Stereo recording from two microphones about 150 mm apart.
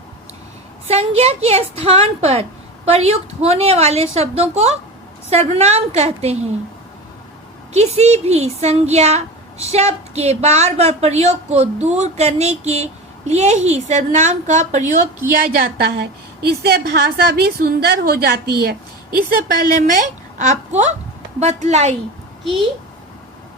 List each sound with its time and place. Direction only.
0.9 s a woman's voice: 45° right (ahead or behind)
7.7 s a woman's voice: 45° right (ahead or behind)
16.6 s a woman's voice: 90° right; by 21.9 s 50° right (ahead or behind)